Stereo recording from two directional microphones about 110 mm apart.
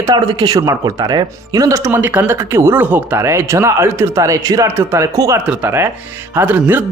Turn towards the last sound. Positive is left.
turn(degrees=-15)  # may be behind; listen again after turning